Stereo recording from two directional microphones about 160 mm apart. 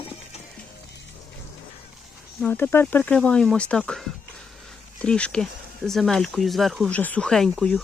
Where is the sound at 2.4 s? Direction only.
10° left (ahead or behind).